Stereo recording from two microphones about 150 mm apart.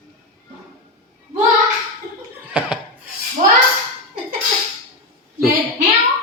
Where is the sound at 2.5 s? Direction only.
5° right (ahead or behind).